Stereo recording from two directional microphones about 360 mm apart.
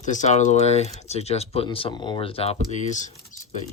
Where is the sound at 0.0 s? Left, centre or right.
Centre.